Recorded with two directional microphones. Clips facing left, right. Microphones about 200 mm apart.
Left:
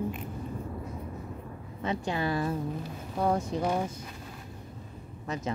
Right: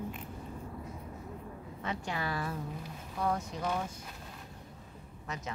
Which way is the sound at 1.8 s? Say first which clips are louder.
Left 6 dB; 25° left (ahead or behind).